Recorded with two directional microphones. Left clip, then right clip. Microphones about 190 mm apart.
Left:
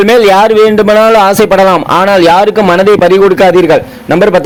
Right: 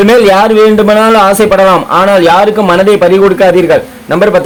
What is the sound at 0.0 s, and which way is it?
A man's voice, 40° left (ahead or behind).